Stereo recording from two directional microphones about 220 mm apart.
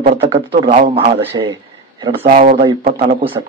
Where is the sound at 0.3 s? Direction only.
25° right (ahead or behind).